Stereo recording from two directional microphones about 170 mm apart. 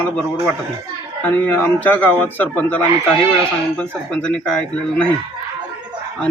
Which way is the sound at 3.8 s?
5° left (ahead or behind).